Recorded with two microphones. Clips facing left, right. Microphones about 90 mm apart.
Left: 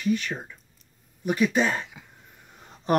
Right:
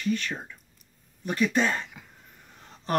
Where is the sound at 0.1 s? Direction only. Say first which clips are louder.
Left 3 dB; 5° left (ahead or behind).